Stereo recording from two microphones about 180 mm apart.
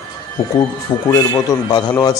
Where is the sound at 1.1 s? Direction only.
20° left (ahead or behind).